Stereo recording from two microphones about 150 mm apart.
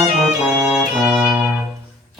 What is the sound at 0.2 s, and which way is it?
Music, 5° right (ahead or behind).